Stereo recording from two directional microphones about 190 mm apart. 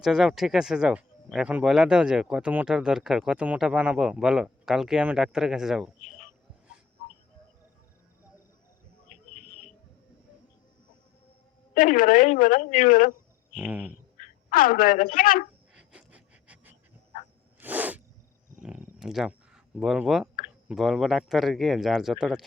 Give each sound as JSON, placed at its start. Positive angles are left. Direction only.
{"t": 0.0, "sound": "speech", "side_deg": 0}
{"t": 11.7, "sound": "a woman's voice", "side_deg": 45}
{"t": 13.5, "sound": "speech", "side_deg": -5}
{"t": 14.2, "sound": "a woman's voice", "side_deg": 50}
{"t": 15.7, "sound": "pant", "side_deg": -5}
{"t": 17.6, "sound": "a sound", "side_deg": -10}
{"t": 19.8, "sound": "speech", "side_deg": 0}